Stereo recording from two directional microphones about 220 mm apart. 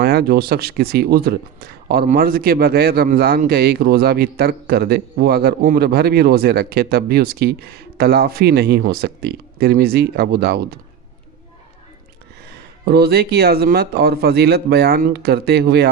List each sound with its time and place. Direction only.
0.0 s speech: 45° right (ahead or behind)
12.8 s speech: 45° right (ahead or behind)